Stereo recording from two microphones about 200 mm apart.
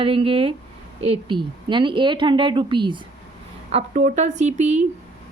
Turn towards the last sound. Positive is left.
turn(degrees=-35)  # may be behind; listen again after turning